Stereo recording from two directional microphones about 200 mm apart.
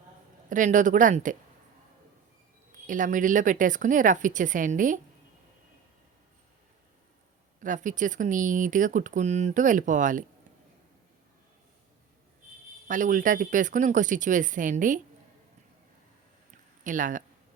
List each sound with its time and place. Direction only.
0.5 s speech: 40° right (ahead or behind)
2.8 s speech: 40° right (ahead or behind)
7.6 s speech: 40° right (ahead or behind)
12.9 s speech: 40° right (ahead or behind)
16.8 s speech: 40° right (ahead or behind)